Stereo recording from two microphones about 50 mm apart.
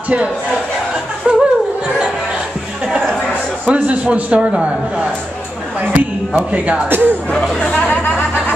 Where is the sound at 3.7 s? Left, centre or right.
Right.